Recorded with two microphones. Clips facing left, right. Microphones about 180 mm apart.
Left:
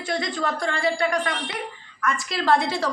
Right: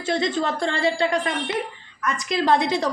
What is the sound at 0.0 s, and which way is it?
A woman's voice, 25° right (ahead or behind).